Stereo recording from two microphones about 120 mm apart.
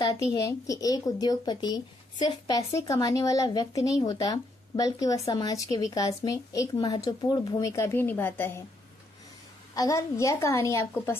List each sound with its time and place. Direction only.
0.0 s speech: 30° left (ahead or behind)
9.8 s a woman's voice: 25° left (ahead or behind)